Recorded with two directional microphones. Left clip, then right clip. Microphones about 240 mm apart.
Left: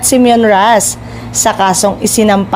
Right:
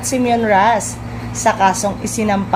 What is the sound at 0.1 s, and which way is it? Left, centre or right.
A woman's voice, left.